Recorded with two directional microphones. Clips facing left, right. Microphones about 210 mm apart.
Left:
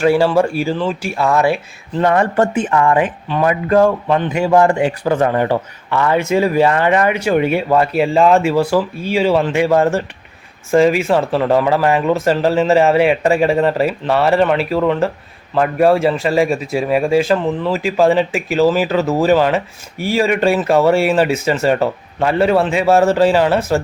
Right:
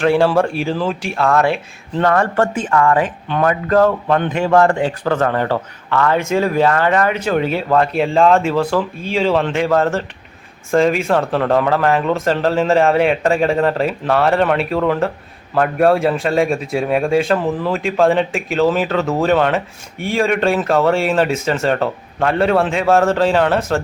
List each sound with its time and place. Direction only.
0.0 s a man's voice: 5° left (ahead or behind)
3.2 s a man's voice: centre (ahead or behind)